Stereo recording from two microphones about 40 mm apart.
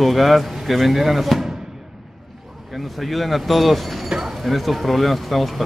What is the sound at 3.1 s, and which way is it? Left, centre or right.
Speech, centre.